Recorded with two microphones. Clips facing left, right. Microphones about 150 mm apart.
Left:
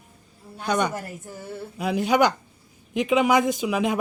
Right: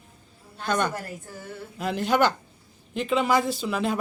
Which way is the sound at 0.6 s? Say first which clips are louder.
Left 2 dB; 10° left (ahead or behind).